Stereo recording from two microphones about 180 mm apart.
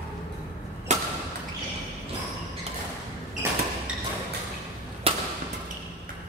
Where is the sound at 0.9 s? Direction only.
40° right (ahead or behind).